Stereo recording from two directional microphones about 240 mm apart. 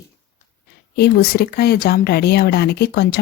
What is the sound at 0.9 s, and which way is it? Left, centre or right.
Speech, left.